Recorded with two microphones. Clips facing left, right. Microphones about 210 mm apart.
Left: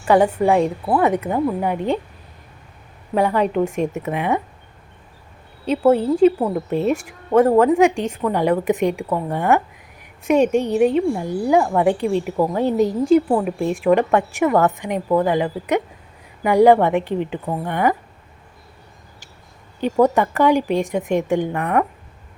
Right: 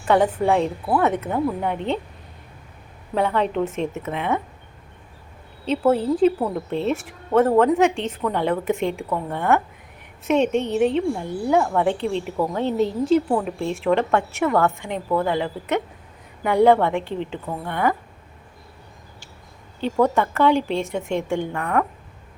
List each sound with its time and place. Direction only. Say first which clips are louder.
0.0 s a woman's voice: left 3 dB; 10° left (ahead or behind)
3.2 s a woman's voice: left 3 dB; 10° left (ahead or behind)
5.6 s a woman's voice: left 3 dB; 10° left (ahead or behind)
19.8 s a woman's voice: left 3 dB; 15° left (ahead or behind)